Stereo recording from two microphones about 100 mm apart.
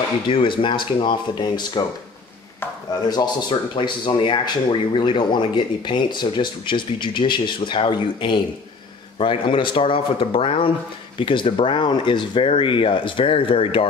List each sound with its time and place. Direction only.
0.3 s speech: 55° left (ahead or behind)
2.9 s speech: 45° left (ahead or behind); by 13.8 s 65° left (ahead or behind)